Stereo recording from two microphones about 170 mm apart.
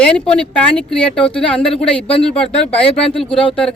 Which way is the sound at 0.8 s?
5° left (ahead or behind).